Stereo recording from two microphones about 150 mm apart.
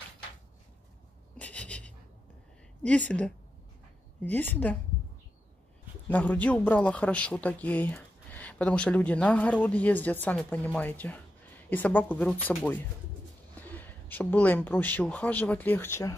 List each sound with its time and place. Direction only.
1.4 s a sound: 10° left (ahead or behind)
2.8 s speech: 10° left (ahead or behind)
6.0 s speech: 10° left (ahead or behind)